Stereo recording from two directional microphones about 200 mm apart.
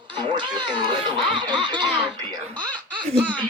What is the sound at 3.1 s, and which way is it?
Speech, 25° right (ahead or behind).